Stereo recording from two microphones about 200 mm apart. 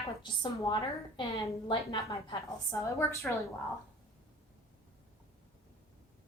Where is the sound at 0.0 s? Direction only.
30° left (ahead or behind).